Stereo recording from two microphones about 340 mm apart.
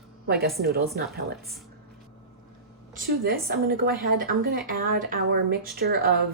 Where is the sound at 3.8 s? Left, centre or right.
Right.